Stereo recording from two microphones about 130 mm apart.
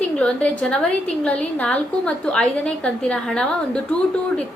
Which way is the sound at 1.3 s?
10° left (ahead or behind).